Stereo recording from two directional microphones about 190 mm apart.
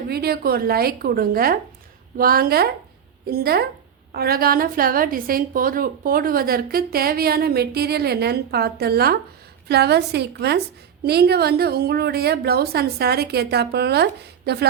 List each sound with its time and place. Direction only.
0.1 s a woman's voice: 55° right (ahead or behind)